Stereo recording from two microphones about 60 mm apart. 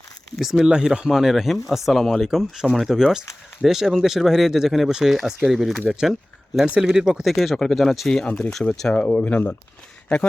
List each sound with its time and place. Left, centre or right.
0.3 s speech: centre
6.7 s speech: centre
8.9 s speech: left
10.1 s speech: centre